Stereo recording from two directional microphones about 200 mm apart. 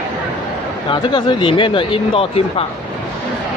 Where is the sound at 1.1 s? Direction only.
25° left (ahead or behind).